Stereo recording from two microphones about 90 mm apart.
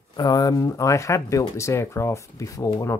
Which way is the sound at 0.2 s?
45° left (ahead or behind).